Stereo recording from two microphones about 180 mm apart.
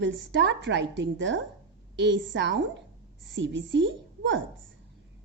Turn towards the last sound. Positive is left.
turn(degrees=-85)